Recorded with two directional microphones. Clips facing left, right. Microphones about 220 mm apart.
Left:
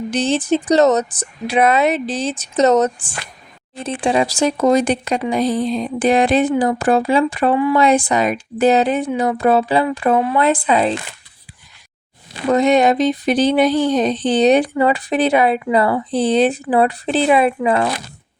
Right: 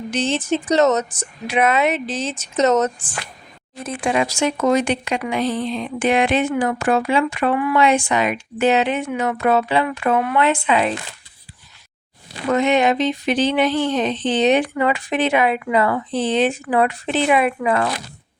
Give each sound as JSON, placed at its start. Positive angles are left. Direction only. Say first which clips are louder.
{"t": 0.1, "sound": "speech", "louder": "left 3 dB", "side_deg": 35}
{"t": 12.5, "sound": "speech", "louder": "left 3 dB", "side_deg": 35}